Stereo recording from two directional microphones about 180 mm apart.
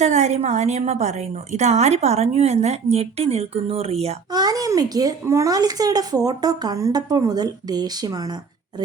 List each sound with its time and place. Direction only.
0.0 s a woman's voice: 40° right (ahead or behind)
4.3 s speech: 20° right (ahead or behind)